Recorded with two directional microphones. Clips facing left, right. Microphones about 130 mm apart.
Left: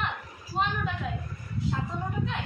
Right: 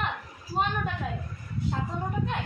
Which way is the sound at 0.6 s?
50° right (ahead or behind).